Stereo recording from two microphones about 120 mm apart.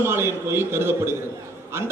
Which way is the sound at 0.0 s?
20° right (ahead or behind).